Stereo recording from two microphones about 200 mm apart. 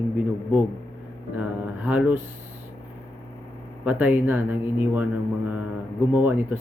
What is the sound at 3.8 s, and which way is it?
Speech, 10° right (ahead or behind).